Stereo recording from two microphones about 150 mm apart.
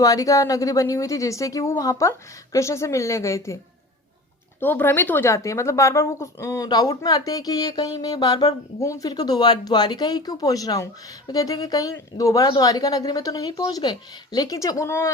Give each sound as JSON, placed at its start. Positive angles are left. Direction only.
{"t": 0.0, "sound": "a woman's voice", "side_deg": 25}
{"t": 4.6, "sound": "a woman's voice", "side_deg": 15}